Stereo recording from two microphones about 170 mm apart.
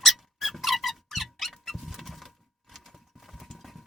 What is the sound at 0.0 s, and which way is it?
Squeak, centre (ahead or behind).